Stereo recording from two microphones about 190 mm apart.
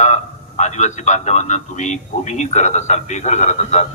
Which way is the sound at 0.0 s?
40° left (ahead or behind).